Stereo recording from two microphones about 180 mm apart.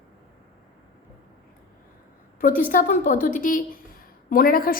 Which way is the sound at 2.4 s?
50° left (ahead or behind).